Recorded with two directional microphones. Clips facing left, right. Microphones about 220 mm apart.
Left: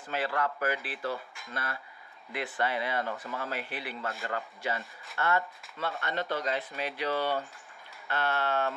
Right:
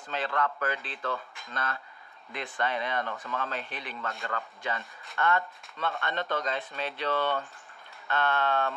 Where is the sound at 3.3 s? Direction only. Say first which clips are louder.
Right 1 dB; 10° left (ahead or behind).